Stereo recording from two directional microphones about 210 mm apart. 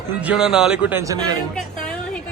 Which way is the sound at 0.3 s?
5° right (ahead or behind).